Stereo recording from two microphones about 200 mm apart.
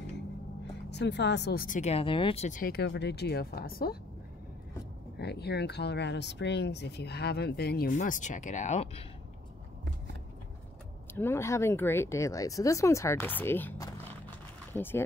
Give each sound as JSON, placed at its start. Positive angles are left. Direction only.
{"t": 0.8, "sound": "speech", "side_deg": 60}
{"t": 5.2, "sound": "speech", "side_deg": 55}
{"t": 11.1, "sound": "speech", "side_deg": 10}